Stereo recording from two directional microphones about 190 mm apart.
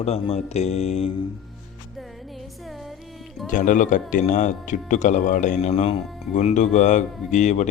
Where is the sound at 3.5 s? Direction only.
45° left (ahead or behind).